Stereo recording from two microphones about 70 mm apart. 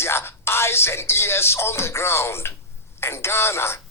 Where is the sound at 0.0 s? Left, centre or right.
Left.